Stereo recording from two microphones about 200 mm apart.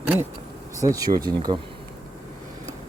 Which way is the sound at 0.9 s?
20° right (ahead or behind).